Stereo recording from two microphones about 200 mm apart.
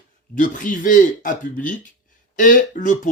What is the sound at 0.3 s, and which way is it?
Speech, 40° left (ahead or behind).